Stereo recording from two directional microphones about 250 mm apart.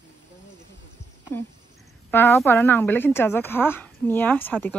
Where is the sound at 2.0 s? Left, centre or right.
Centre.